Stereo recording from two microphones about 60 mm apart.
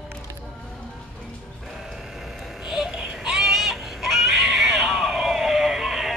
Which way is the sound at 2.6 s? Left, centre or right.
Centre.